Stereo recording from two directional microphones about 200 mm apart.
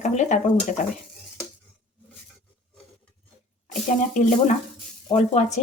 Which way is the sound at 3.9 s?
40° left (ahead or behind).